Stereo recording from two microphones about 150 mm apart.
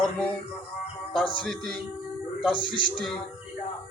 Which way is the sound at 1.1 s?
35° left (ahead or behind).